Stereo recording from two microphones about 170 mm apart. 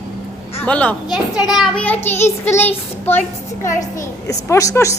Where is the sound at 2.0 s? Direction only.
15° left (ahead or behind).